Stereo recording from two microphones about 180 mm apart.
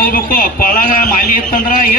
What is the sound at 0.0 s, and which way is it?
A man's voice, 50° left (ahead or behind).